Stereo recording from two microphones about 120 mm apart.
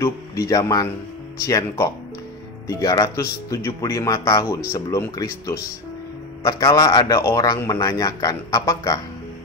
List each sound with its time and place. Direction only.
0.0 s a man's voice: 25° left (ahead or behind)